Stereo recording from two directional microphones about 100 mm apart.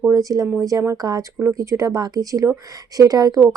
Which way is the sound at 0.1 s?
35° right (ahead or behind).